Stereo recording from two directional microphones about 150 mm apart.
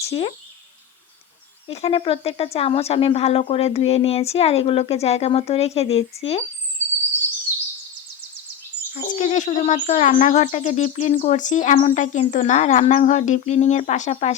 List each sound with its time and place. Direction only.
0.0 s speech: 40° left (ahead or behind)
1.6 s speech: 40° left (ahead or behind)
8.9 s speech: 60° left (ahead or behind)